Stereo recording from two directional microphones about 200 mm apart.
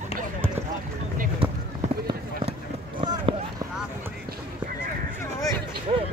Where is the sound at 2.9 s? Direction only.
25° right (ahead or behind).